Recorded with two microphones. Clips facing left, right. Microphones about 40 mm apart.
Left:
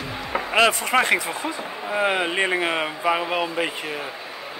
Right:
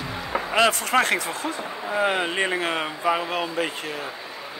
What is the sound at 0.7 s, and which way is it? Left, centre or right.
Speech, centre.